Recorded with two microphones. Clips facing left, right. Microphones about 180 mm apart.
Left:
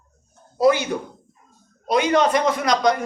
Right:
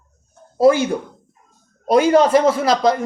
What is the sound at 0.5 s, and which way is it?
Speech, 40° right (ahead or behind).